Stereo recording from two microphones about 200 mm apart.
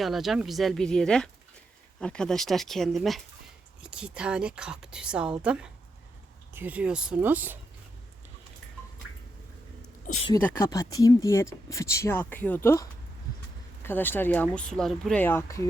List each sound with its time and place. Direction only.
0.0 s a woman's voice: centre (ahead or behind)
10.1 s speech: 40° left (ahead or behind)
10.4 s speech: 15° left (ahead or behind)